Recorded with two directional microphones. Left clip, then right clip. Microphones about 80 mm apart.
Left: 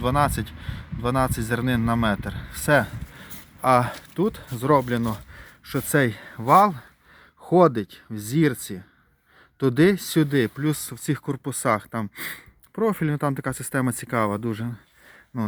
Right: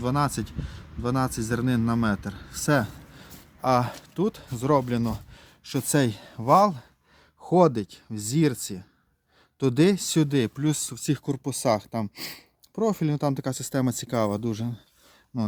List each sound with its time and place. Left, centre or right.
0.0 s a man's voice: centre
5.3 s speech: right
14.3 s speech: right